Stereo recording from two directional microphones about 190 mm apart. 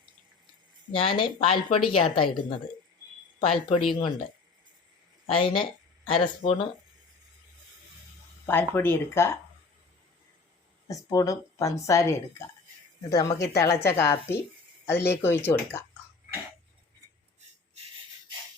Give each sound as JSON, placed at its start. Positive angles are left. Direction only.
{"t": 0.9, "sound": "a woman's voice", "side_deg": 25}
{"t": 3.4, "sound": "speech", "side_deg": 30}
{"t": 5.2, "sound": "a woman's voice", "side_deg": 30}
{"t": 8.4, "sound": "a woman's voice", "side_deg": 10}
{"t": 10.8, "sound": "a woman's voice", "side_deg": 20}